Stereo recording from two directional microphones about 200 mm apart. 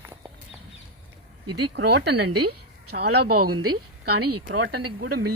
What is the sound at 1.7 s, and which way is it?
Speech, 55° right (ahead or behind).